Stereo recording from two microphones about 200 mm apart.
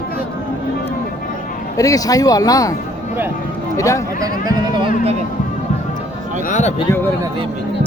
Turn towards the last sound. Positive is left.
turn(degrees=35)  # may be behind; listen again after turning